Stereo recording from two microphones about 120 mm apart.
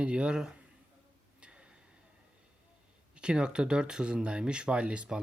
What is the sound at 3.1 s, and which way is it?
Speech, 10° right (ahead or behind).